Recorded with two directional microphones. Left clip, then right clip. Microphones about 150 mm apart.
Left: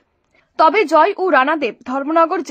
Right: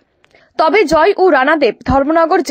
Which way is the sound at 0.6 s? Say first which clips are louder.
Right 1 dB; 25° right (ahead or behind).